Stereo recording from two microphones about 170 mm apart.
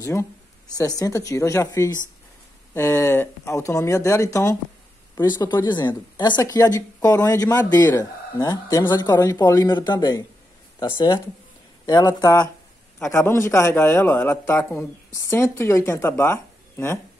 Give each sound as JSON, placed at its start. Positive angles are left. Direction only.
{"t": 0.0, "sound": "a man's voice", "side_deg": 15}